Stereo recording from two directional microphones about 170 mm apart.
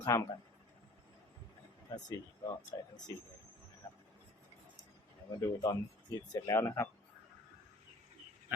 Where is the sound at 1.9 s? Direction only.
25° left (ahead or behind).